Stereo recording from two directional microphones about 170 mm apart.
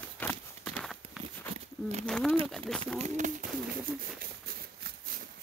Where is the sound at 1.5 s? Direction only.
40° right (ahead or behind).